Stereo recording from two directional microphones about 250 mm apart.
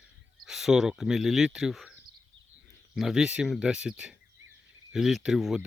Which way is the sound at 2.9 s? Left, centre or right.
Centre.